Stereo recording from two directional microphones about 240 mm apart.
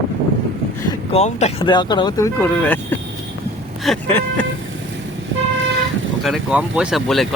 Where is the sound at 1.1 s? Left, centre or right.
Left; by 2.8 s centre.